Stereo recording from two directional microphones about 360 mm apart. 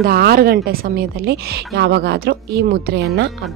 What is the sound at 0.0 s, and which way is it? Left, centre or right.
A woman's voice, right.